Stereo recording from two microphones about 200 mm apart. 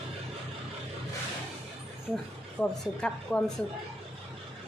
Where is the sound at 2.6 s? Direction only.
5° left (ahead or behind).